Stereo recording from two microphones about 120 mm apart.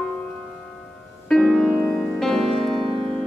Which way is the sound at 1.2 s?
5° left (ahead or behind).